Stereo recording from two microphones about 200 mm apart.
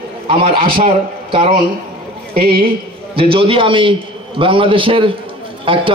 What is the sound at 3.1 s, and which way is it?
A man's voice, 25° right (ahead or behind).